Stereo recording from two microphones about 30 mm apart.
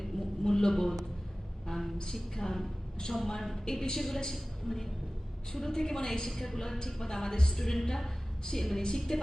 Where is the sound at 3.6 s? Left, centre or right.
Centre.